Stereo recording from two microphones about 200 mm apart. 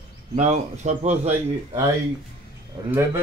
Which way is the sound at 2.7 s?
25° right (ahead or behind).